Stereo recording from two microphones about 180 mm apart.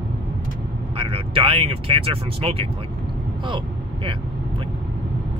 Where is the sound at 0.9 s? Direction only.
30° right (ahead or behind).